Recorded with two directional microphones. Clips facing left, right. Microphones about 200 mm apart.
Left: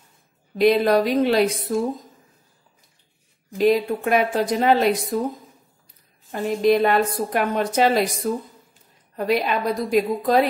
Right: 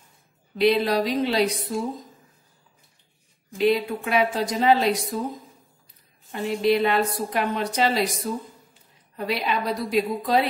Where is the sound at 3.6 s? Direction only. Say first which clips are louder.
Left 3 dB; 45° left (ahead or behind).